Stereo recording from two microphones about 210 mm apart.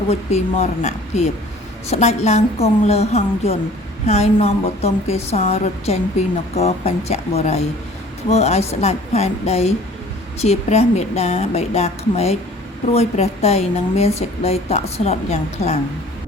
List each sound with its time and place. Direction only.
0.6 s a woman's voice: 30° left (ahead or behind)